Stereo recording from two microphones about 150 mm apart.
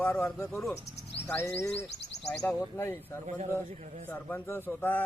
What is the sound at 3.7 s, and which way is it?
Speech, 50° right (ahead or behind).